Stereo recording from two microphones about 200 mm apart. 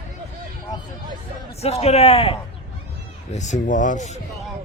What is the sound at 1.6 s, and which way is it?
Speech, 30° left (ahead or behind).